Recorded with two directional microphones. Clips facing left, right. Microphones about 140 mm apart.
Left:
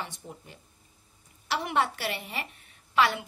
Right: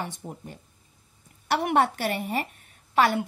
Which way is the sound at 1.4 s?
55° right (ahead or behind).